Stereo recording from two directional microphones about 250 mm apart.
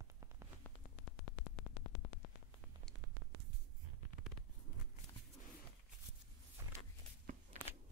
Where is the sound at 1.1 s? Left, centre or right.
Left.